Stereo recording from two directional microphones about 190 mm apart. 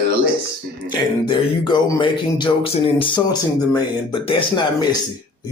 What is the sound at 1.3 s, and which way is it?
Speech, 25° left (ahead or behind).